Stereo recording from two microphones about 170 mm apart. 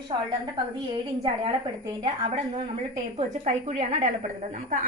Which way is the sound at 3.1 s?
40° right (ahead or behind).